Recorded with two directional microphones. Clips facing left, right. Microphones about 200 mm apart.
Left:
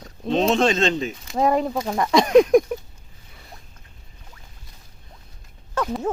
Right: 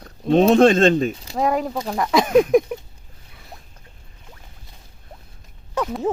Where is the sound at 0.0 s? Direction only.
55° right (ahead or behind).